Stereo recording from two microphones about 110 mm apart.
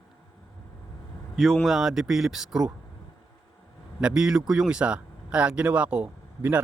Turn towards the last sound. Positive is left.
turn(degrees=-15)  # may be behind; listen again after turning